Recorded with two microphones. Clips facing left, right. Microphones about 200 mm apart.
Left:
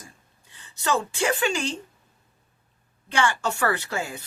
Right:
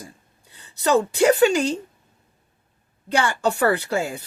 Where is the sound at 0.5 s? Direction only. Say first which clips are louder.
Right 7 dB; 35° right (ahead or behind).